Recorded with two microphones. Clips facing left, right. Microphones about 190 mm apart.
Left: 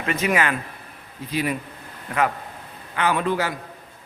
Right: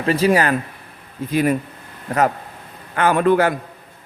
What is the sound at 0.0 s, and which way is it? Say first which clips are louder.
Speech: right 6 dB; 35° right (ahead or behind).